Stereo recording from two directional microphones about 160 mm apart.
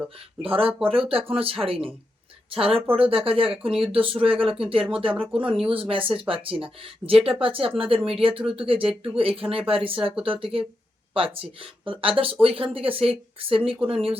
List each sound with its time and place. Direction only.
0.4 s speech: 35° right (ahead or behind)